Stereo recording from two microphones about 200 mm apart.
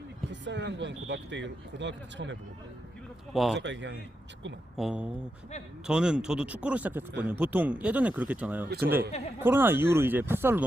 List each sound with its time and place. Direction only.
0.3 s speech: 65° right (ahead or behind)
3.3 s speech: centre (ahead or behind)
3.6 s speech: 65° right (ahead or behind)
4.8 s speech: 5° right (ahead or behind)